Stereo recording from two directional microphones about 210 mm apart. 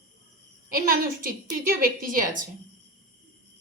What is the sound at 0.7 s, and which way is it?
A woman's voice, 45° right (ahead or behind).